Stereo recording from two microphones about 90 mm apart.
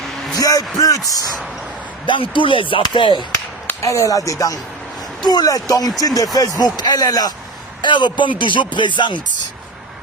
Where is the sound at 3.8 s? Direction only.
35° left (ahead or behind).